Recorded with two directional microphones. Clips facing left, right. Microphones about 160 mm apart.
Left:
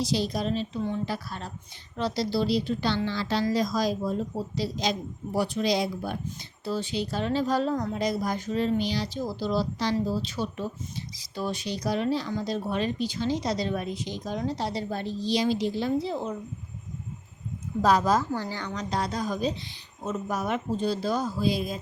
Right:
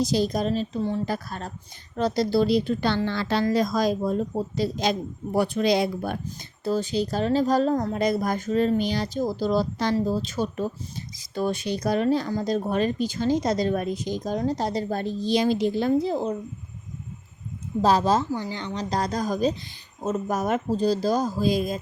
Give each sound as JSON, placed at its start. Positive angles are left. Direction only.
{"t": 0.0, "sound": "speech", "side_deg": -45}
{"t": 1.0, "sound": "speech", "side_deg": -45}
{"t": 6.7, "sound": "speech", "side_deg": -45}
{"t": 17.8, "sound": "speech", "side_deg": -30}